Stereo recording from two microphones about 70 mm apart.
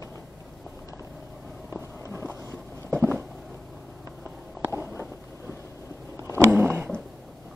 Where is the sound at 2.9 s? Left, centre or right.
Right.